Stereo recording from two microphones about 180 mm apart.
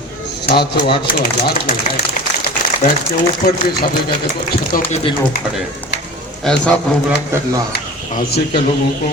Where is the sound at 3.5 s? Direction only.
55° left (ahead or behind).